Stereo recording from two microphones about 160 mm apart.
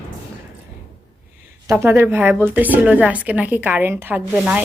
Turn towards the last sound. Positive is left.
turn(degrees=-10)  # may be behind; listen again after turning